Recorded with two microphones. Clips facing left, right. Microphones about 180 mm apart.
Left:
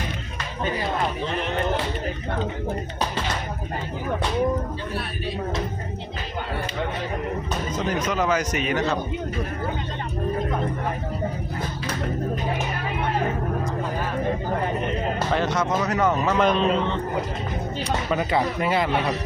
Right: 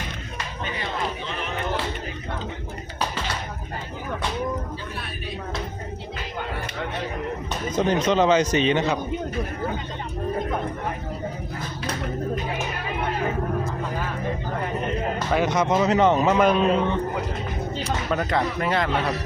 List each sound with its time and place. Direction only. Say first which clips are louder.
7.9 s speech: right 5 dB; 30° right (ahead or behind)
15.3 s speech: right 3 dB; 15° right (ahead or behind)
16.4 s speech: right 1 dB; 10° right (ahead or behind)
17.8 s speech: left 1 dB; 5° left (ahead or behind)